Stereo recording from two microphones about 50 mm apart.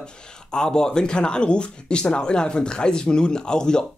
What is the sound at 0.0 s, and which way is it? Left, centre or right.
Speech, centre.